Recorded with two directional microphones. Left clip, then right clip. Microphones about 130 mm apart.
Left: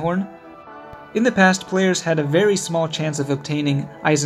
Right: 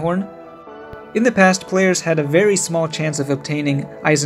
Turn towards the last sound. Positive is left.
turn(degrees=-25)  # may be behind; listen again after turning